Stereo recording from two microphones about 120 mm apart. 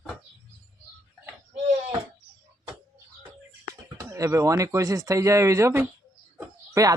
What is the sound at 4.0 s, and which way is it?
Speech, 25° right (ahead or behind).